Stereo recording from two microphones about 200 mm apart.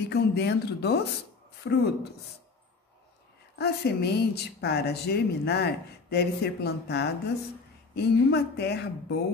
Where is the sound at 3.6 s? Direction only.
55° left (ahead or behind).